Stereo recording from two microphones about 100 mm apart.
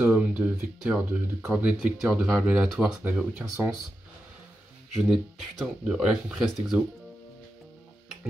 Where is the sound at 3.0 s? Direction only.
15° right (ahead or behind).